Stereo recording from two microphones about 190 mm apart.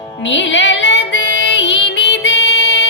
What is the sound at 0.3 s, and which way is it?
Music, 75° left (ahead or behind).